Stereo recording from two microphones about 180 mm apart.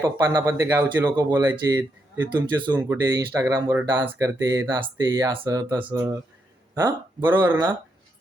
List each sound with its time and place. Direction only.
0.0 s speech: 20° right (ahead or behind)